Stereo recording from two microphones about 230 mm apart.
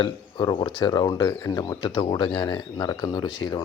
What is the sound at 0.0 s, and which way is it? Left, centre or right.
Speech, centre.